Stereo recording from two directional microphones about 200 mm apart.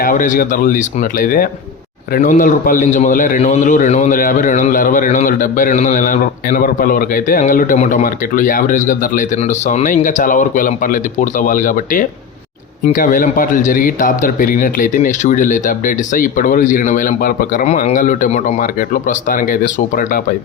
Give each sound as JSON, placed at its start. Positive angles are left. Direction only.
{"t": 0.0, "sound": "a man's voice", "side_deg": 40}
{"t": 19.3, "sound": "a man's voice", "side_deg": 45}